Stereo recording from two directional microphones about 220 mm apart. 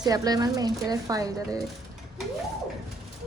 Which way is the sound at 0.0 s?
15° right (ahead or behind).